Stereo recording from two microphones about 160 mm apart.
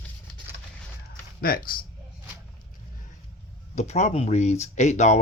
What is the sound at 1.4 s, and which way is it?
Speech, 70° left (ahead or behind).